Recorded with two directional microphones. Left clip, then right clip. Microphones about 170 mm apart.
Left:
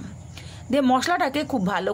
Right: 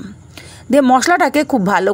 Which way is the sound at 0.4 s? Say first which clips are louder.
Right 10 dB; 40° right (ahead or behind).